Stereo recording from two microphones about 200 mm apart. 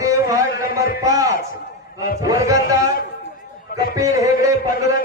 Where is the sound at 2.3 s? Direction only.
15° right (ahead or behind).